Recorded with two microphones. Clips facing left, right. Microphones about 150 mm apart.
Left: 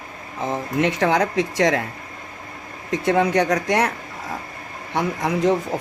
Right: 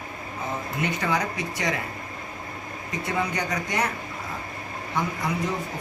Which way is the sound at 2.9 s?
90° left.